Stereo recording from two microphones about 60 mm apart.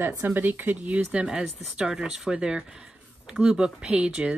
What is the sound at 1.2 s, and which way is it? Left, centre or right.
Speech, centre.